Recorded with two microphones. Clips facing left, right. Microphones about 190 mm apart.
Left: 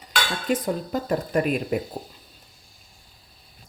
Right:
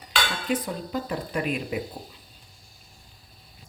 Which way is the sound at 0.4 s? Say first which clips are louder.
Left 3 dB; 45° left (ahead or behind).